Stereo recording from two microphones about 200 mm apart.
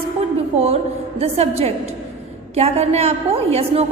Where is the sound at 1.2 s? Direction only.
30° right (ahead or behind).